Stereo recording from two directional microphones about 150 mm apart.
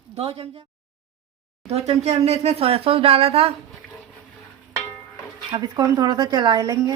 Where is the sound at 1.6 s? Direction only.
45° right (ahead or behind).